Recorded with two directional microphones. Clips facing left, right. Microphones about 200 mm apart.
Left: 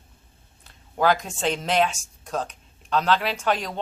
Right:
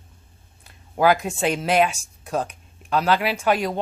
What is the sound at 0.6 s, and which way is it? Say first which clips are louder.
Speech: right 3 dB; 10° right (ahead or behind).